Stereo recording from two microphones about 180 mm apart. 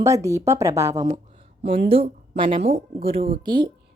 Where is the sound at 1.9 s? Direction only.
30° right (ahead or behind).